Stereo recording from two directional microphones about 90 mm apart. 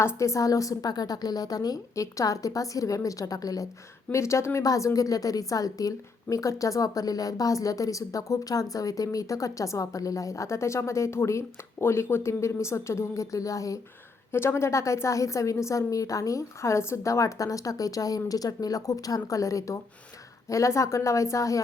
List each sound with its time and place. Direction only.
0.0 s a woman's voice: 30° left (ahead or behind)
4.1 s a woman's voice: 30° left (ahead or behind)